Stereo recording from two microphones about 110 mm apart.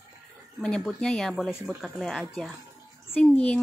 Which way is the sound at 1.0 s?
5° left (ahead or behind).